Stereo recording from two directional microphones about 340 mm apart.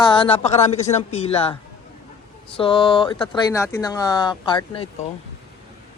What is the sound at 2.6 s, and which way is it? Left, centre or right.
Speech, centre.